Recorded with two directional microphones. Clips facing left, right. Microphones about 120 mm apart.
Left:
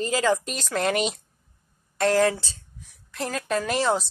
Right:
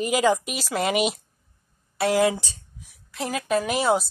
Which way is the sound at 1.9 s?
10° right (ahead or behind).